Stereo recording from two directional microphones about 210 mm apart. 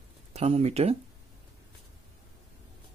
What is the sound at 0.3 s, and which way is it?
Speech, 30° right (ahead or behind).